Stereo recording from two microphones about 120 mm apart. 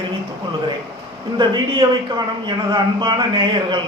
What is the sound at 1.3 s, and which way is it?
A man's voice, 40° right (ahead or behind).